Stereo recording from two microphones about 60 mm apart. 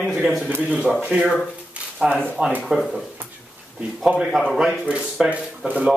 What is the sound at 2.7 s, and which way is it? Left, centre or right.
Speech, centre.